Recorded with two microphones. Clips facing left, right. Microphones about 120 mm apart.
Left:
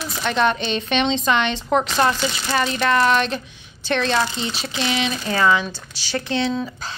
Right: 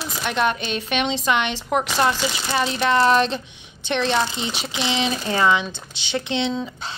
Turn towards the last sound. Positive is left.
turn(degrees=-25)  # may be behind; listen again after turning